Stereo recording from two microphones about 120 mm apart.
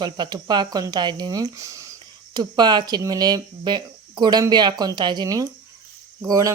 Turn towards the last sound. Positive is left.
turn(degrees=-25)  # may be behind; listen again after turning